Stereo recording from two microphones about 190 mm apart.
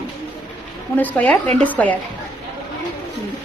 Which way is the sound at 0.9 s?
10° left (ahead or behind).